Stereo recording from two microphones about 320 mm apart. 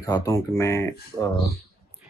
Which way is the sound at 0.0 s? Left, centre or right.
Centre.